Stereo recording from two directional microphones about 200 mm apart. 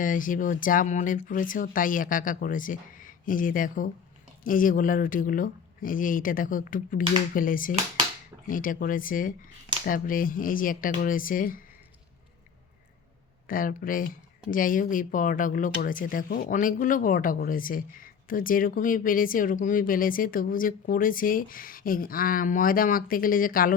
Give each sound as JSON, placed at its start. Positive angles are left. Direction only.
{"t": 0.0, "sound": "speech", "side_deg": 40}
{"t": 13.5, "sound": "speech", "side_deg": 45}